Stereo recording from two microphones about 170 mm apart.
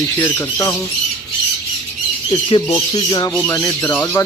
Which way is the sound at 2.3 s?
30° left (ahead or behind).